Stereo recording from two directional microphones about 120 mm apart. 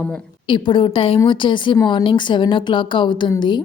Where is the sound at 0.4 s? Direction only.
45° left (ahead or behind).